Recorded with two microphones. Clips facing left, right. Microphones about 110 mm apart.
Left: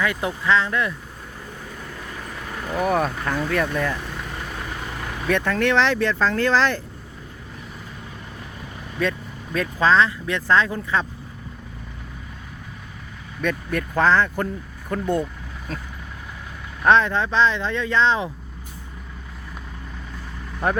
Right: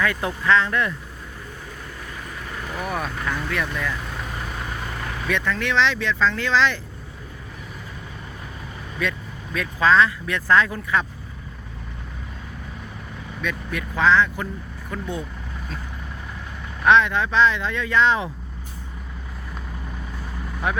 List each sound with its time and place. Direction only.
0.0 s speech: 20° left (ahead or behind)
2.7 s speech: 45° left (ahead or behind)
5.3 s speech: 50° left (ahead or behind)
9.0 s speech: 35° left (ahead or behind)
13.4 s speech: 45° left (ahead or behind)
16.8 s speech: 35° left (ahead or behind)
20.6 s speech: 40° left (ahead or behind)